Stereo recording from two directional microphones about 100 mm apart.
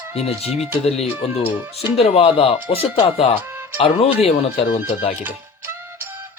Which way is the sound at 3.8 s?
85° left.